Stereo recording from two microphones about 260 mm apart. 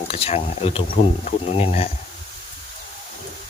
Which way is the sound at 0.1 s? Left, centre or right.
Left.